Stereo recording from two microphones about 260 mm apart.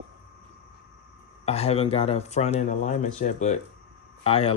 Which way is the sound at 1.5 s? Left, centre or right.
Left.